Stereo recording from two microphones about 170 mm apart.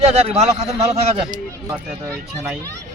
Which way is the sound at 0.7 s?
20° right (ahead or behind).